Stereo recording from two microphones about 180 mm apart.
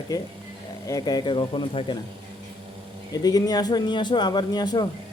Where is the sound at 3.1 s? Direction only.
20° left (ahead or behind).